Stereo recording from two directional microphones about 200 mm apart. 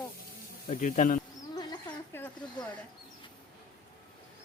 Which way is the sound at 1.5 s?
20° left (ahead or behind).